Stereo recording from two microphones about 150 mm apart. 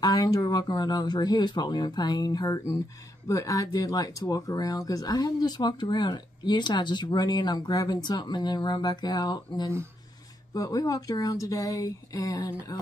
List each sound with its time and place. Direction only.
0.0 s speech: 25° left (ahead or behind)